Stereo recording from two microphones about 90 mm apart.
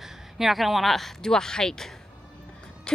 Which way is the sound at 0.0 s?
Centre (ahead or behind).